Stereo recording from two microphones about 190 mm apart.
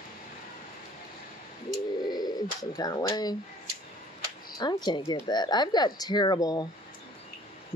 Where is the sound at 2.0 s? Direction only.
20° left (ahead or behind).